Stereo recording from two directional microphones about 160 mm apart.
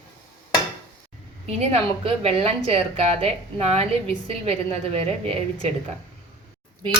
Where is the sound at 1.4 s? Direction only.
40° right (ahead or behind).